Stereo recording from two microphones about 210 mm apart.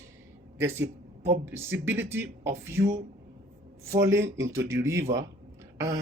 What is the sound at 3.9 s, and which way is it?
Speech, 15° right (ahead or behind).